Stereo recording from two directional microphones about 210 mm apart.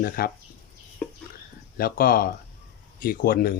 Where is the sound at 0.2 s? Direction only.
45° left (ahead or behind).